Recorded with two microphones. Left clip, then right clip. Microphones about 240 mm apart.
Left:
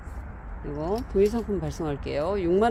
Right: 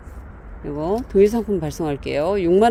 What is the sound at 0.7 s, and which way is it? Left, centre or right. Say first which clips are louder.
Speech: right 7 dB; right.